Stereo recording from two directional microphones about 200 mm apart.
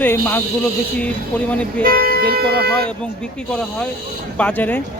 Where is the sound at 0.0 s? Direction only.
10° left (ahead or behind).